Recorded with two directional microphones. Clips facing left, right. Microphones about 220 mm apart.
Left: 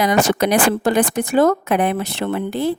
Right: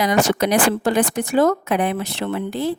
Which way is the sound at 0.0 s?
55° left (ahead or behind).